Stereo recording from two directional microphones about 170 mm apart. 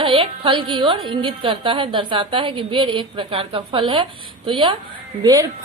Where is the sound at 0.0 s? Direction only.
30° right (ahead or behind).